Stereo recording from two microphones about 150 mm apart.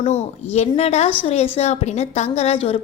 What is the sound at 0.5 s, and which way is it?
A woman's voice, 45° left (ahead or behind).